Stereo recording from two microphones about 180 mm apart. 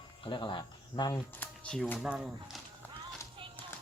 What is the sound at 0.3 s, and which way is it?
Speech, 25° left (ahead or behind).